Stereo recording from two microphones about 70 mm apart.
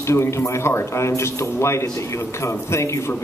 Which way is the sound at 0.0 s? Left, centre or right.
Left.